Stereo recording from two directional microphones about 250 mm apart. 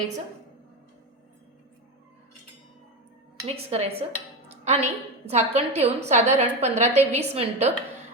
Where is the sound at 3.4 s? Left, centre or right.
Right.